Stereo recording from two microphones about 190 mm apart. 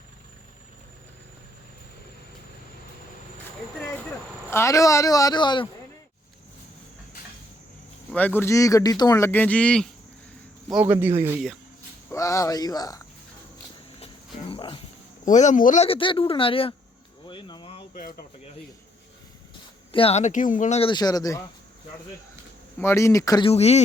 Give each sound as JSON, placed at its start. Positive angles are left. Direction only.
{"t": 4.5, "sound": "speech", "side_deg": 15}
{"t": 8.1, "sound": "speech", "side_deg": 10}
{"t": 10.7, "sound": "speech", "side_deg": -10}
{"t": 12.0, "sound": "speech", "side_deg": 15}
{"t": 14.4, "sound": "cricket", "side_deg": 25}
{"t": 15.2, "sound": "speech", "side_deg": 40}
{"t": 17.2, "sound": "a sound", "side_deg": 25}
{"t": 19.9, "sound": "speech", "side_deg": 30}
{"t": 22.8, "sound": "speech", "side_deg": 15}
{"t": 23.5, "sound": "speech", "side_deg": 35}